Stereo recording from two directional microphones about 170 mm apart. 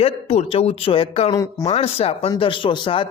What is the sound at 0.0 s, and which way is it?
Speech, 35° left (ahead or behind).